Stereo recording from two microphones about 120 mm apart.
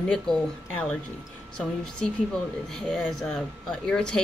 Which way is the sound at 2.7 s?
5° left (ahead or behind).